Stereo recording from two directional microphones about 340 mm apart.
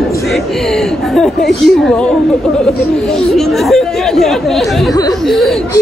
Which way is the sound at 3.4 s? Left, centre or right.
Centre.